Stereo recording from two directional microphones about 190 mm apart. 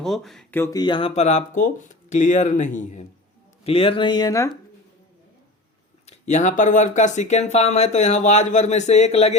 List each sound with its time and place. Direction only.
0.0 s speech: centre (ahead or behind)
0.6 s speech: 20° left (ahead or behind)
6.1 s speech: 40° left (ahead or behind)